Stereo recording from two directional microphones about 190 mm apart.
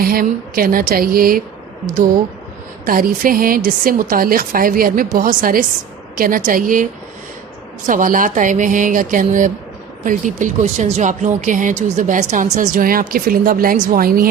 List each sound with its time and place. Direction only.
0.0 s speech: 50° right (ahead or behind)
2.8 s speech: 50° right (ahead or behind)
7.9 s speech: 45° right (ahead or behind)